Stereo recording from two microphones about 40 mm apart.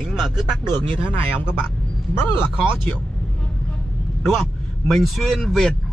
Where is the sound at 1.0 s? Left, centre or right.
Left.